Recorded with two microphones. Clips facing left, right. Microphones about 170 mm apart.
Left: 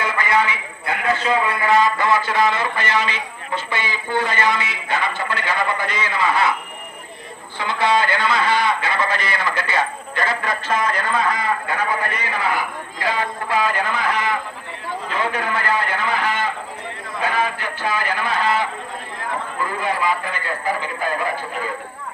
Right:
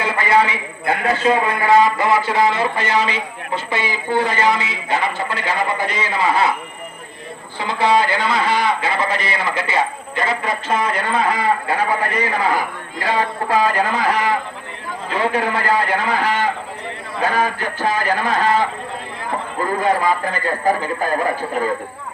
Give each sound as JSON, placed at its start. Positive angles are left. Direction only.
{"t": 0.0, "sound": "a man's voice", "side_deg": -25}
{"t": 7.6, "sound": "a man's voice", "side_deg": -30}
{"t": 19.7, "sound": "a man's voice", "side_deg": -40}